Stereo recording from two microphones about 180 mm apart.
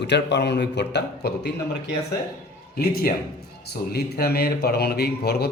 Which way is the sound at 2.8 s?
55° left (ahead or behind).